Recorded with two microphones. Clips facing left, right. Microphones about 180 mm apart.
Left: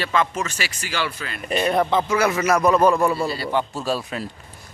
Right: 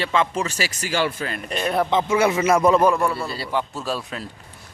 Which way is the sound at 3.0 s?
25° left (ahead or behind).